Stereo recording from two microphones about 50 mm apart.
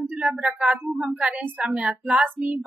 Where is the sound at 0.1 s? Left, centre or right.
Centre.